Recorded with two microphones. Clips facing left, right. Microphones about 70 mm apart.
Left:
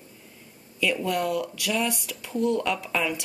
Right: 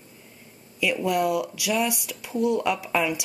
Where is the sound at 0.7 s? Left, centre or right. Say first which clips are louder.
Right 2 dB; centre.